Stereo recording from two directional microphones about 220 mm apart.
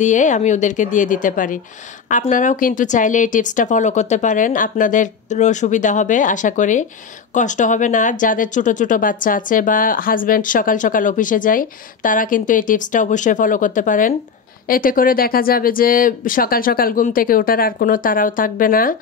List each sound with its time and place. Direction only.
0.0 s speech: 35° left (ahead or behind)